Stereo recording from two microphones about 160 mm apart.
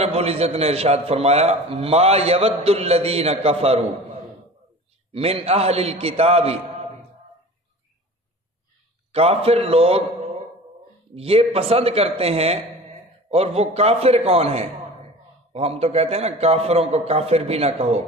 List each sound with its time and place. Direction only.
0.0 s a man's voice: 40° right (ahead or behind)
5.1 s a man's voice: 40° right (ahead or behind)
9.1 s a man's voice: 40° right (ahead or behind)
11.1 s a man's voice: 40° right (ahead or behind)